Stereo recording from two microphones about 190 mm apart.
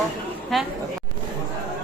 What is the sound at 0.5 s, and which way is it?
Speech, centre (ahead or behind).